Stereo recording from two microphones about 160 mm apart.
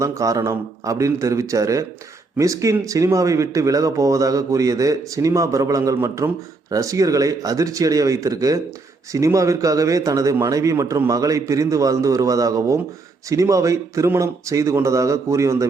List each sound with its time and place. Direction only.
0.0 s speech: 20° right (ahead or behind)